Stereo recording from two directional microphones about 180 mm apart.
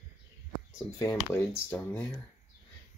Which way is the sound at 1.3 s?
10° left (ahead or behind).